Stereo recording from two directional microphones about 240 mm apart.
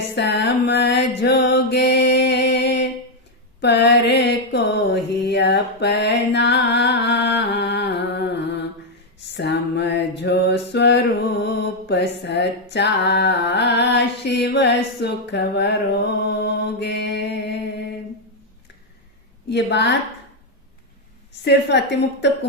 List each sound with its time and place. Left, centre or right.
0.2 s mantra: left
9.3 s music: left
19.5 s a woman's voice: left
21.4 s a woman's voice: left